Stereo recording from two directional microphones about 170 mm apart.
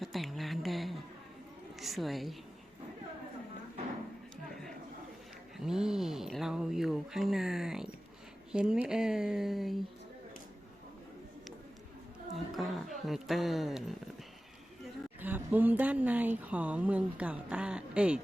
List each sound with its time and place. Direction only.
0.0 s speech: centre (ahead or behind)
5.5 s speech: 5° right (ahead or behind)
12.5 s speech: centre (ahead or behind)
15.2 s speech: 10° right (ahead or behind)